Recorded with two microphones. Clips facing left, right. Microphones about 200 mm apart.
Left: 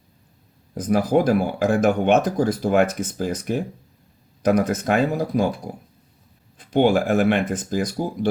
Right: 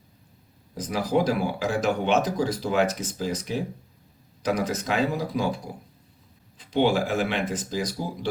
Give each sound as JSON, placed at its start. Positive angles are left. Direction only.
{"t": 0.7, "sound": "speech", "side_deg": 50}
{"t": 6.6, "sound": "speech", "side_deg": 50}